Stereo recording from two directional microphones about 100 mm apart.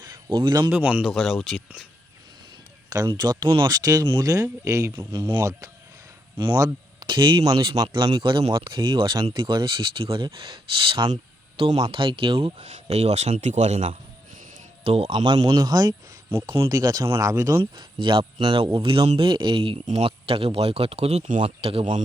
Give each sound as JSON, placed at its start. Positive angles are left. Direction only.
{"t": 0.3, "sound": "speech", "side_deg": -55}
{"t": 0.7, "sound": "speech", "side_deg": -15}
{"t": 1.1, "sound": "speech", "side_deg": 0}
{"t": 3.2, "sound": "speech", "side_deg": -45}
{"t": 4.9, "sound": "speech", "side_deg": -50}
{"t": 5.4, "sound": "speech", "side_deg": -35}
{"t": 7.0, "sound": "a man's voice", "side_deg": -50}
{"t": 15.1, "sound": "speech", "side_deg": -50}
{"t": 15.4, "sound": "speech", "side_deg": -40}
{"t": 17.7, "sound": "a man's voice", "side_deg": -55}